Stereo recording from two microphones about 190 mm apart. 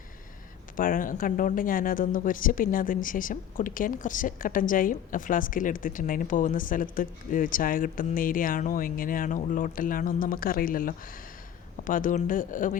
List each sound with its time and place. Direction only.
0.8 s speech: 45° left (ahead or behind)